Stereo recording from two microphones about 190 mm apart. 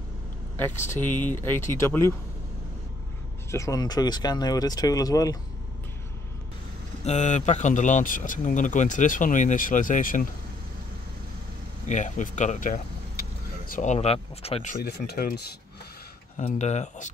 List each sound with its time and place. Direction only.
0.6 s speech: 10° left (ahead or behind)
3.5 s speech: 15° left (ahead or behind)
7.1 s a man's voice: 40° left (ahead or behind)
11.9 s speech: 40° left (ahead or behind)
14.8 s speech: 60° left (ahead or behind)
16.3 s a man's voice: 35° left (ahead or behind)